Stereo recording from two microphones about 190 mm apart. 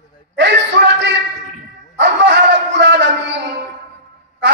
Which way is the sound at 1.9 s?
70° right (ahead or behind).